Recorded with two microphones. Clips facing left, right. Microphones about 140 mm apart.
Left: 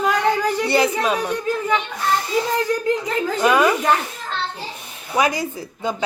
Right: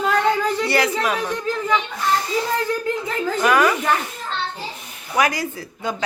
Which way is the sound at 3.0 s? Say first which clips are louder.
Left 2 dB; 20° left (ahead or behind).